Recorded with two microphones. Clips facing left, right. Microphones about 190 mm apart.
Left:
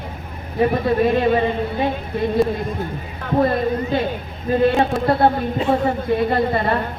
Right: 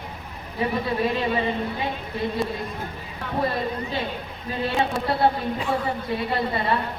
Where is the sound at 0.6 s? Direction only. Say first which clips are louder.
Left 7 dB; 50° left (ahead or behind).